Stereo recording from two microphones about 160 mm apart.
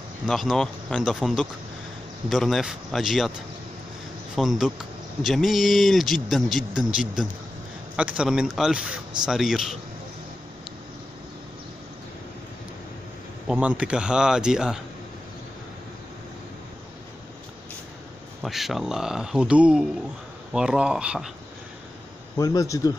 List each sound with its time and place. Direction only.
0.3 s speech: centre (ahead or behind)
4.4 s speech: centre (ahead or behind)
13.5 s speech: 5° right (ahead or behind)
18.4 s speech: centre (ahead or behind)
22.4 s speech: 20° left (ahead or behind)